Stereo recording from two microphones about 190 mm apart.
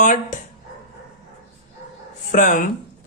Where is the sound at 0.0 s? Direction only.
40° left (ahead or behind).